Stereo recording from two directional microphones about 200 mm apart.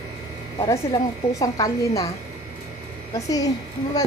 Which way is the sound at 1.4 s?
15° left (ahead or behind).